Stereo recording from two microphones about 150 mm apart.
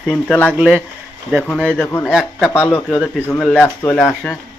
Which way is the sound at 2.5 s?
15° left (ahead or behind).